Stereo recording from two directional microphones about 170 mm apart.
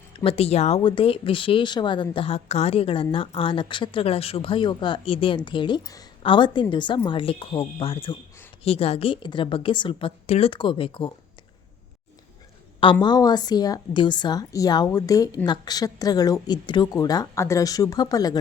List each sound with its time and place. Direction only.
0.1 s speech: 30° left (ahead or behind)
12.8 s a woman's voice: 25° left (ahead or behind)